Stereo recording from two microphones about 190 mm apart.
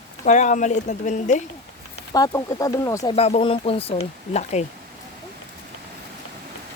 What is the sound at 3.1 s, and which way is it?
Speech, 30° left (ahead or behind).